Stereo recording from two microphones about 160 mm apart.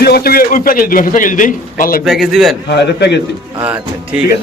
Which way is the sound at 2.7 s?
90° left.